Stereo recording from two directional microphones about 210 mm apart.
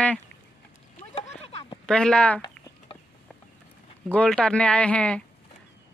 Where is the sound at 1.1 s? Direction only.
30° left (ahead or behind).